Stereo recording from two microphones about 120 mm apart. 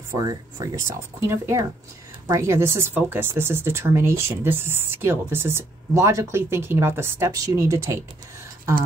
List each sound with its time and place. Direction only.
0.2 s speech: 35° right (ahead or behind)
1.2 s speech: 20° right (ahead or behind)